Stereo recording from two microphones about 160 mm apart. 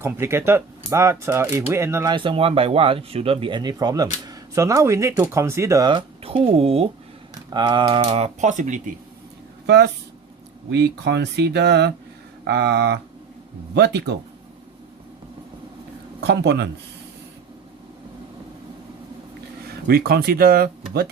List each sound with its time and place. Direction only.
0.0 s speech: 15° right (ahead or behind)
2.1 s speech: 35° right (ahead or behind)
5.9 s speech: 35° right (ahead or behind)
7.5 s speech: 25° right (ahead or behind); by 8.8 s 50° right (ahead or behind)
9.6 s speech: 90° right
16.2 s speech: 90° right
19.9 s speech: 70° right (ahead or behind)